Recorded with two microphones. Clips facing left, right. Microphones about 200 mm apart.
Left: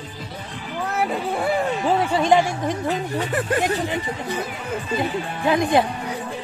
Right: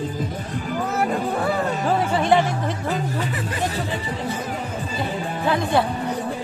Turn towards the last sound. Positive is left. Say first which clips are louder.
# left 2 dB
turn(degrees=15)  # may be behind; listen again after turning